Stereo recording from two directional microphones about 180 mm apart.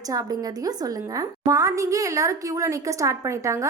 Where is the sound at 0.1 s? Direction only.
20° right (ahead or behind).